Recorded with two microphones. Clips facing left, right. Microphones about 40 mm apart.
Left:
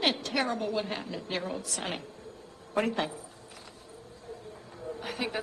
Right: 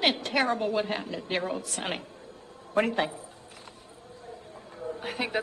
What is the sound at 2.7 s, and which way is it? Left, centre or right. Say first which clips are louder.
Speech: right 3 dB; centre.